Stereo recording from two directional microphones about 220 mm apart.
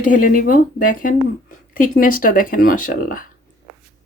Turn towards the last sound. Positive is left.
turn(degrees=40)  # may be behind; listen again after turning